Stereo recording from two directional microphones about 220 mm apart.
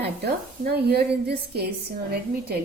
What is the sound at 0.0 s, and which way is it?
A woman's voice, 45° right (ahead or behind).